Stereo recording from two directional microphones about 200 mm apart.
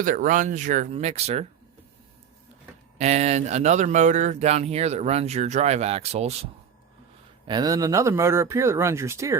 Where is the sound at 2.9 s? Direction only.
35° right (ahead or behind).